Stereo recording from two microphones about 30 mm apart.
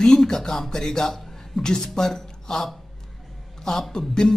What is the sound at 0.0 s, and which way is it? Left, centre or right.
A man's voice, centre.